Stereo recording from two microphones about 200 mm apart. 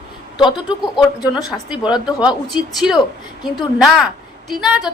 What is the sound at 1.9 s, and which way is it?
Speech, 20° left (ahead or behind).